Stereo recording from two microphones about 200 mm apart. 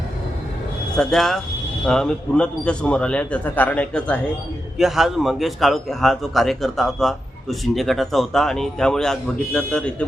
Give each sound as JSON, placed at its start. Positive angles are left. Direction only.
{"t": 0.9, "sound": "a man's voice", "side_deg": 0}